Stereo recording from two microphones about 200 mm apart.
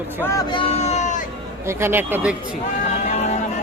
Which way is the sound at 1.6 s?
10° right (ahead or behind).